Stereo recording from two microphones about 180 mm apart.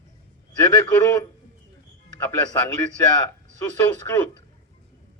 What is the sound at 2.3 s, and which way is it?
Speech, 10° left (ahead or behind).